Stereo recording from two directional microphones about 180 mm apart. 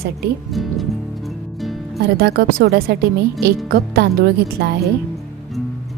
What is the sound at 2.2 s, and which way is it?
A woman's voice, 65° right (ahead or behind).